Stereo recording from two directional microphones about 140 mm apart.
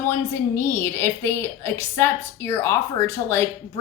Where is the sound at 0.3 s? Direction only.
20° left (ahead or behind).